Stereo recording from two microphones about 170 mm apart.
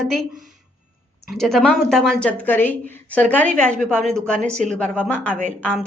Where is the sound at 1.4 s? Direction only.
Centre (ahead or behind).